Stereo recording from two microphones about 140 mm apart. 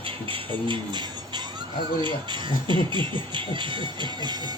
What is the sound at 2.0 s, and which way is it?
Speech, 35° right (ahead or behind).